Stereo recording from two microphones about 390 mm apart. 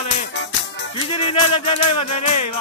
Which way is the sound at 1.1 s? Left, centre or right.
Centre.